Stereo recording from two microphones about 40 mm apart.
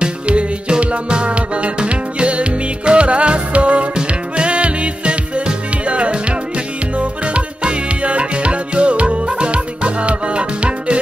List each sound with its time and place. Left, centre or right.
0.0 s music: right